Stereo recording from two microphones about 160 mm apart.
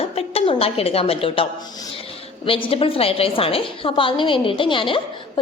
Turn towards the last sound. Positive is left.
turn(degrees=30)  # may be behind; listen again after turning